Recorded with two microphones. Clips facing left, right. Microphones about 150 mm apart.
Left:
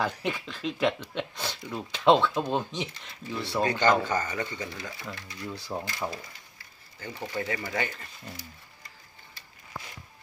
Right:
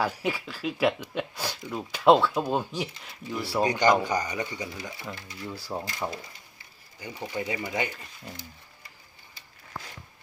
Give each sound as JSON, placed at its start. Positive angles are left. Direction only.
{"t": 0.0, "sound": "speech", "side_deg": -5}
{"t": 5.5, "sound": "speech", "side_deg": -5}
{"t": 7.0, "sound": "speech", "side_deg": -15}